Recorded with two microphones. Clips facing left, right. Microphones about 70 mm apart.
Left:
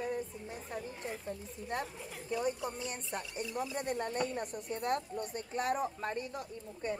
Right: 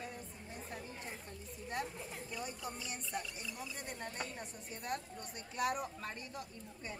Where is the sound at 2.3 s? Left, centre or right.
Left.